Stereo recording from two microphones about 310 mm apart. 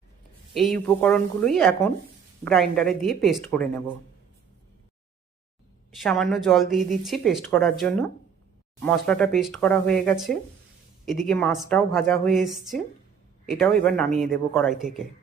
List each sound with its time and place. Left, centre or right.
0.5 s speech: centre
6.0 s speech: centre